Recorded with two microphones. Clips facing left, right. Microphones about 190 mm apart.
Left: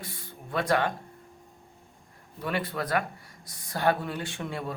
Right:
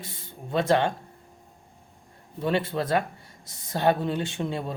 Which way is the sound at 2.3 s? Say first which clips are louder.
Right 5 dB; 25° right (ahead or behind).